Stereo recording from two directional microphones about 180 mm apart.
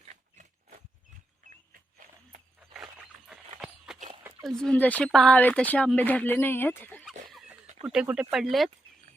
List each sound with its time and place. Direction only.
0.1 s a sound: 45° right (ahead or behind)
2.6 s dog: 5° right (ahead or behind)
3.9 s a sound: 5° right (ahead or behind)
4.6 s speech: 5° left (ahead or behind)
7.3 s dog: centre (ahead or behind)
7.9 s speech: 5° right (ahead or behind)